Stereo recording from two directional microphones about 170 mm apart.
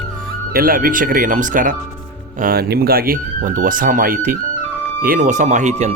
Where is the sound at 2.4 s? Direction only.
65° right (ahead or behind).